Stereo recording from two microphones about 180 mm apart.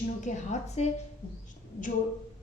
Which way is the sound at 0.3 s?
45° left (ahead or behind).